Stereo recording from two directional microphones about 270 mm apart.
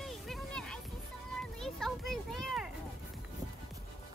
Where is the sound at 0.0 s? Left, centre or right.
Centre.